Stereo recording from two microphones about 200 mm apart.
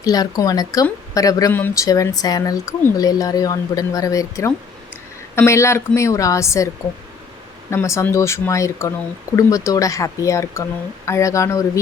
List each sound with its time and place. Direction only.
0.0 s a woman's voice: 20° left (ahead or behind)
7.7 s a woman's voice: 15° left (ahead or behind)